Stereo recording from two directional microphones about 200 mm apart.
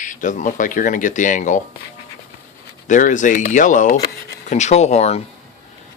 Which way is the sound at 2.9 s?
40° left (ahead or behind).